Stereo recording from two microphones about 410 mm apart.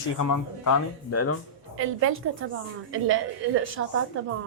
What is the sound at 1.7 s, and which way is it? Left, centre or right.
A woman's voice, right.